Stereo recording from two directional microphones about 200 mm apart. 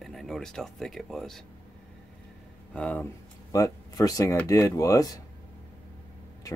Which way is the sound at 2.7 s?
5° left (ahead or behind).